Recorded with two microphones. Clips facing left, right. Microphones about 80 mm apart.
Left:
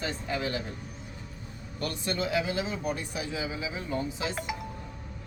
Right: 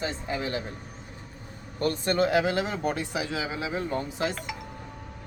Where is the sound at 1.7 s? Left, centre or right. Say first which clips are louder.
Right 7 dB; right.